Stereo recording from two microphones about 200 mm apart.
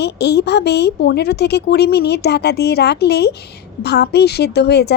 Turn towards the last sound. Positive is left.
turn(degrees=55)  # may be behind; listen again after turning